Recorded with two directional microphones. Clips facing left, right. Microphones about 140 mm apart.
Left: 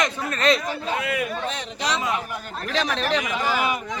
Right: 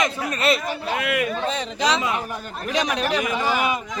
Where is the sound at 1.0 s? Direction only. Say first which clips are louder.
Right 5 dB; 75° right (ahead or behind).